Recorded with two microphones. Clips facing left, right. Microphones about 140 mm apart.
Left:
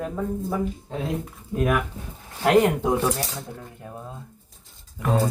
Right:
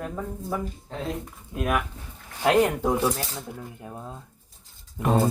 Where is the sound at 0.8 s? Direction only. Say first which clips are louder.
Left 3 dB; centre (ahead or behind).